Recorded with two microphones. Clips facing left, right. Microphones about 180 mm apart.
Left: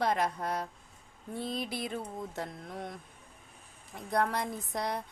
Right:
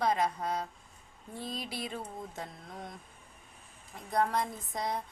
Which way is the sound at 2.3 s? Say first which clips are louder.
Left 4 dB; 65° left (ahead or behind).